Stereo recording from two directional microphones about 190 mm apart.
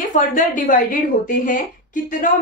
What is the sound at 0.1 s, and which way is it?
A woman's voice, 45° left (ahead or behind).